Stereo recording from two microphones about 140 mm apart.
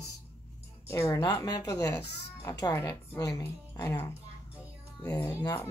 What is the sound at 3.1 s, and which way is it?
A woman's voice, 20° left (ahead or behind).